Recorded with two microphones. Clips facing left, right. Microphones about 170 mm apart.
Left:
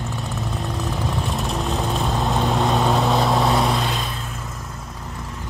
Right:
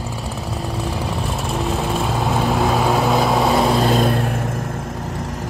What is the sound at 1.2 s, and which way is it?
Vehicle, centre (ahead or behind).